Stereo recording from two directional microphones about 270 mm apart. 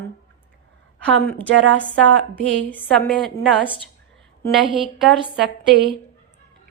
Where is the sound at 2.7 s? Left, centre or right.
Centre.